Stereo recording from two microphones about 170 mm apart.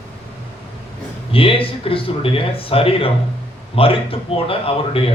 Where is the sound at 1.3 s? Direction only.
30° left (ahead or behind).